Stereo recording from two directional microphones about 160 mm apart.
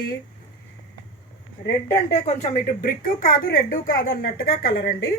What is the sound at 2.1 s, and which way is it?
A woman's voice, 45° left (ahead or behind).